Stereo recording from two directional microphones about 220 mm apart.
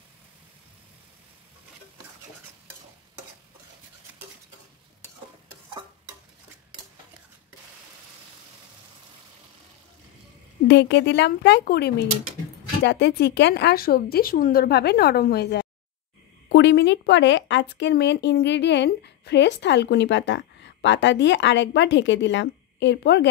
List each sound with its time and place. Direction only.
10.7 s speech: 50° left (ahead or behind)